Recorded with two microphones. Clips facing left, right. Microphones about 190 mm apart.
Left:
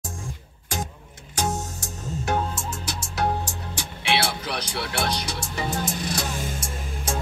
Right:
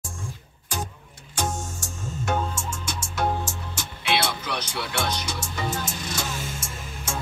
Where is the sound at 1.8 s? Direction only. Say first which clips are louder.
Left 1 dB; 35° left (ahead or behind).